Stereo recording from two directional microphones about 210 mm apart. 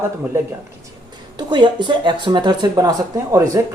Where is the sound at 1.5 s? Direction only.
20° right (ahead or behind).